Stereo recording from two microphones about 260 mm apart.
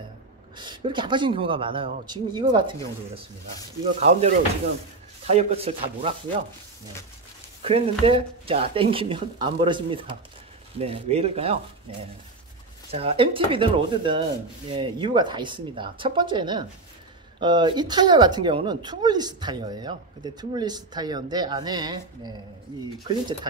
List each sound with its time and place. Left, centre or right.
0.6 s speech: centre
3.8 s speech: right
7.6 s speech: right